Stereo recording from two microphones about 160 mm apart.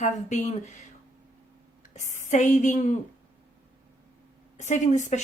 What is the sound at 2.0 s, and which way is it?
Speech, 50° left (ahead or behind).